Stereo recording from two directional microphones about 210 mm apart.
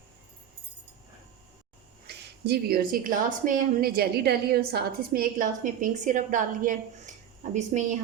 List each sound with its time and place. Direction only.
2.0 s a woman's voice: 50° right (ahead or behind); by 7.9 s 35° right (ahead or behind)